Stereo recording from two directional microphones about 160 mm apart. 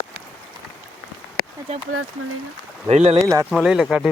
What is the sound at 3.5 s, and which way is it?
Speech, centre (ahead or behind).